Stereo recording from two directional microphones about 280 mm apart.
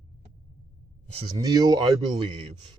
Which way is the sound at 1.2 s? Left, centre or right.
Centre.